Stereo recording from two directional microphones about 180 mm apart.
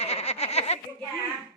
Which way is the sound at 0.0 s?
35° left (ahead or behind).